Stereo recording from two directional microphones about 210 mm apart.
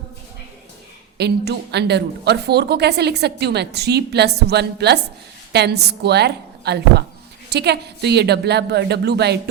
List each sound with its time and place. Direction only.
1.2 s a woman's voice: 50° right (ahead or behind)